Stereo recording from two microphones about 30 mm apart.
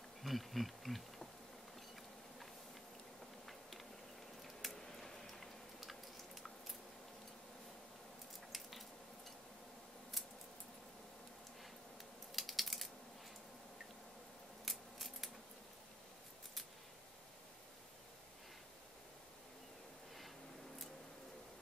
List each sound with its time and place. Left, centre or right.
0.2 s speech: centre
4.4 s a sound: centre
4.7 s a sound: centre
5.8 s chewing: centre
8.5 s squish: centre
12.4 s typing: centre
14.6 s scissors: centre